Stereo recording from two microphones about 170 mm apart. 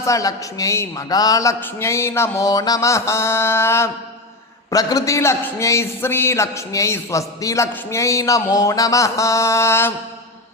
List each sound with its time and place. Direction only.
0.0 s a man's voice: 20° left (ahead or behind)